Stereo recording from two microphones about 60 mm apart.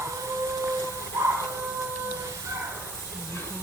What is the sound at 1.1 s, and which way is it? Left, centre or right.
Printer, right.